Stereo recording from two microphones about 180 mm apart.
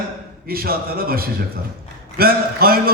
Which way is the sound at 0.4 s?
55° right (ahead or behind).